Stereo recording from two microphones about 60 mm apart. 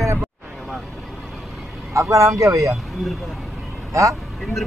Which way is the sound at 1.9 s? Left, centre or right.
Right.